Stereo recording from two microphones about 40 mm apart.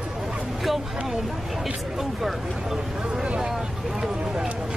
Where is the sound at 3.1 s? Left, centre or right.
Centre.